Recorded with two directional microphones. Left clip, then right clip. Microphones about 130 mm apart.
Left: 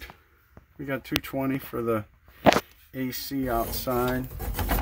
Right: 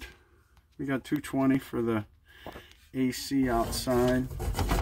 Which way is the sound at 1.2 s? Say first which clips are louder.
Right 2 dB; 10° left (ahead or behind).